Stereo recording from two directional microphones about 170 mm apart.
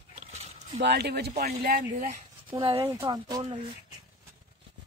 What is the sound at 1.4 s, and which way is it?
Speech, 60° right (ahead or behind).